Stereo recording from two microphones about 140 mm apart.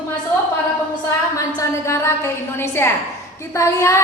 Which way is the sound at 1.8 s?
20° left (ahead or behind).